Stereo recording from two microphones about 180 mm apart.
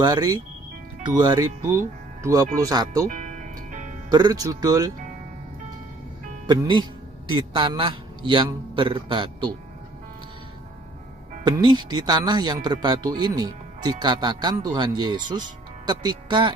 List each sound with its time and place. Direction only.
0.0 s speech: 20° right (ahead or behind)
3.1 s music: 45° right (ahead or behind)
4.1 s speech: 20° right (ahead or behind)
6.5 s speech: 25° right (ahead or behind)
11.4 s speech: 25° right (ahead or behind)